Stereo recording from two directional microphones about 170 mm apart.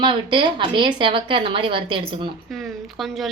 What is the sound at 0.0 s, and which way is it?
Speech, 30° right (ahead or behind).